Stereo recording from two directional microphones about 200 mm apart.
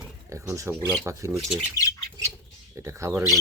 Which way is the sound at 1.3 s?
5° right (ahead or behind).